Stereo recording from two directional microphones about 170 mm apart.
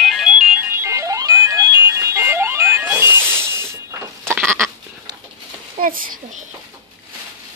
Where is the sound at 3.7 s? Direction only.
15° right (ahead or behind).